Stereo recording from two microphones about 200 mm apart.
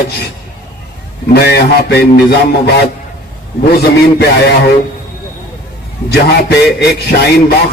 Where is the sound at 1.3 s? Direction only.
50° left (ahead or behind).